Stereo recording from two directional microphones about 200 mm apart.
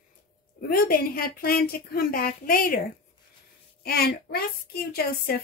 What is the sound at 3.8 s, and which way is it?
A child's voice, 50° left (ahead or behind).